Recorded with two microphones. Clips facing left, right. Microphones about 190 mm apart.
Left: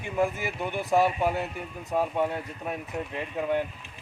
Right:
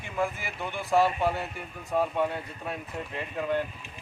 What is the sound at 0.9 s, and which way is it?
Speech, 15° left (ahead or behind).